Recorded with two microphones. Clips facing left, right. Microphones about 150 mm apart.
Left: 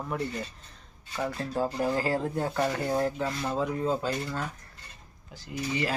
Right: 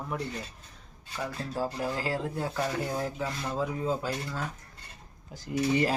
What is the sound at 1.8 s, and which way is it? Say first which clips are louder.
Speech: left 4 dB; centre (ahead or behind).